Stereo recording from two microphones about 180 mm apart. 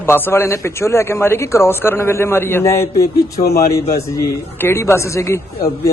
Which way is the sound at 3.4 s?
40° left (ahead or behind).